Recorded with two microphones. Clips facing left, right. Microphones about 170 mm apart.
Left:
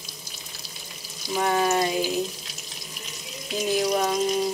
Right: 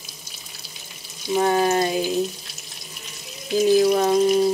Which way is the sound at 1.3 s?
30° right (ahead or behind).